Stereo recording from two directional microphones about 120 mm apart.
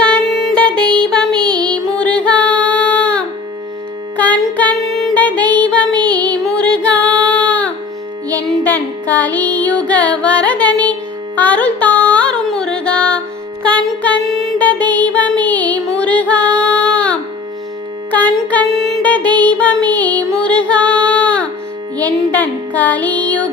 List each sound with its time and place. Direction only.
0.3 s music: centre (ahead or behind)
1.5 s music: 35° right (ahead or behind)
2.0 s music: 10° left (ahead or behind)
4.9 s child singing: centre (ahead or behind)
5.1 s music: 15° left (ahead or behind)
6.1 s child singing: 10° left (ahead or behind)
8.6 s music: 15° left (ahead or behind)
14.6 s music: 15° left (ahead or behind)
19.4 s child singing: 10° left (ahead or behind)
20.3 s music: 10° left (ahead or behind)